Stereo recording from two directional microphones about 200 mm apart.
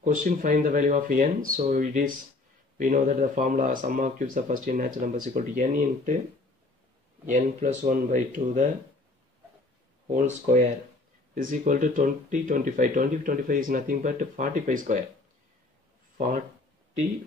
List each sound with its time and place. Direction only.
0.0 s speech: 40° right (ahead or behind)
7.2 s speech: 40° right (ahead or behind)
10.1 s speech: 40° right (ahead or behind)